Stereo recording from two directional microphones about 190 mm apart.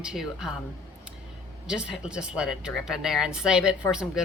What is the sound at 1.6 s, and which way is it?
A woman's voice, 5° right (ahead or behind).